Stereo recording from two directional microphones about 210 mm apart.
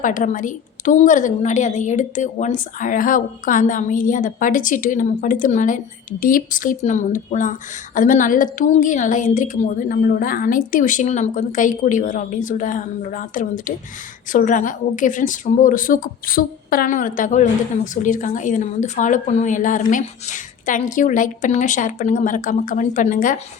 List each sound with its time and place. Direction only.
0.0 s a woman's voice: 40° left (ahead or behind)